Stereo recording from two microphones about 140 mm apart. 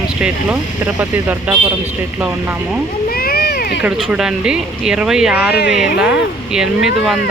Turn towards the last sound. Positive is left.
turn(degrees=-5)  # may be behind; listen again after turning